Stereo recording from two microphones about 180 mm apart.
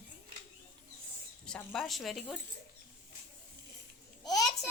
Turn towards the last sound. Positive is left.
turn(degrees=20)  # may be behind; listen again after turning